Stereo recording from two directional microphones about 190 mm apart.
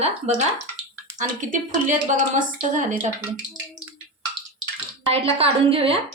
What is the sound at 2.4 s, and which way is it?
Speech, 40° right (ahead or behind).